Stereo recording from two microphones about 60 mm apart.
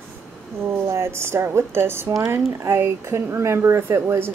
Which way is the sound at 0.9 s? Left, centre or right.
Right.